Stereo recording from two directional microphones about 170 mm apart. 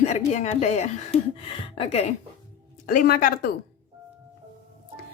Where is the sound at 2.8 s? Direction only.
60° left (ahead or behind).